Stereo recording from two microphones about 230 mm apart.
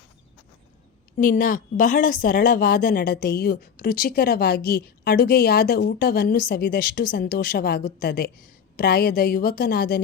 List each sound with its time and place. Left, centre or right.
1.2 s a woman's voice: left